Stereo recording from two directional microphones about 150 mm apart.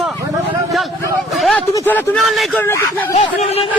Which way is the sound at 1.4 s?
5° left (ahead or behind).